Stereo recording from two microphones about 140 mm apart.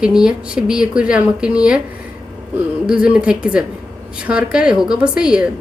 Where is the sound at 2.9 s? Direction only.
5° right (ahead or behind).